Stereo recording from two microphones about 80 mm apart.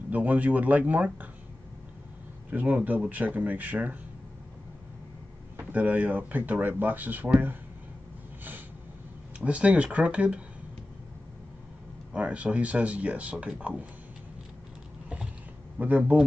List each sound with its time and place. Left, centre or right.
0.1 s speech: centre
2.5 s speech: right
5.6 s speech: centre
9.4 s speech: centre
12.1 s speech: centre
15.8 s speech: centre